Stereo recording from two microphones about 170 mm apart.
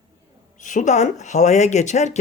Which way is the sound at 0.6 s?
45° left (ahead or behind).